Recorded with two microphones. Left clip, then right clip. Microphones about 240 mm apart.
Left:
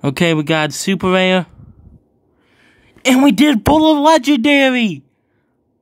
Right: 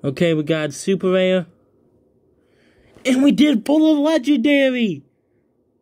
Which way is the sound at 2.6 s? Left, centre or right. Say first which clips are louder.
Left 6 dB; left.